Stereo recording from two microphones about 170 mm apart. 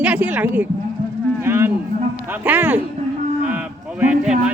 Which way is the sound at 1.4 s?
15° right (ahead or behind).